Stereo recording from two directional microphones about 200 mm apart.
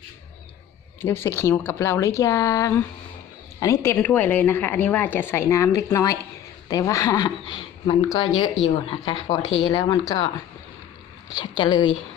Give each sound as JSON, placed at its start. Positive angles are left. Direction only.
{"t": 1.0, "sound": "a woman's voice", "side_deg": 10}
{"t": 11.3, "sound": "a woman's voice", "side_deg": 20}